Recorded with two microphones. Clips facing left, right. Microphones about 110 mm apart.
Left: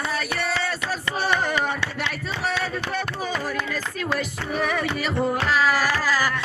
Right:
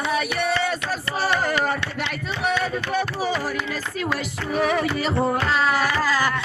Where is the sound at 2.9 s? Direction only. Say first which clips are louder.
Right 4 dB; 15° right (ahead or behind).